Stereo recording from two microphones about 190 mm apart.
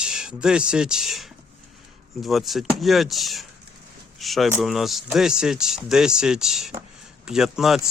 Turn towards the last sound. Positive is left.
turn(degrees=0)  # may be behind; listen again after turning